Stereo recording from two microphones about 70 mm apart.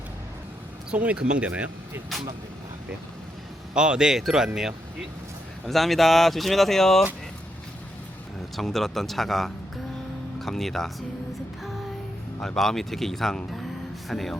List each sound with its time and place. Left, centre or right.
0.9 s speech: centre
3.8 s speech: centre
8.5 s speech: centre
12.4 s speech: centre